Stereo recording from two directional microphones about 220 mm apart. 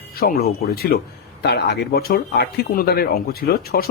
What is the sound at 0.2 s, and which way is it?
Speech, 45° left (ahead or behind).